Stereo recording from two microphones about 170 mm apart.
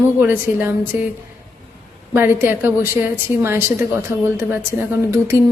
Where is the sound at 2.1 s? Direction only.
15° right (ahead or behind).